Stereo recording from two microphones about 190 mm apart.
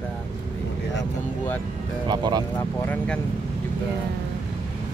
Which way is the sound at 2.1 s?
20° right (ahead or behind).